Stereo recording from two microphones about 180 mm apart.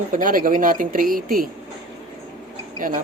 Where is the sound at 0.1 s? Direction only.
50° right (ahead or behind).